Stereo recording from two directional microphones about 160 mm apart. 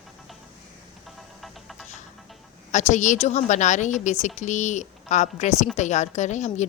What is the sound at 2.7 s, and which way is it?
Speech, 50° left (ahead or behind).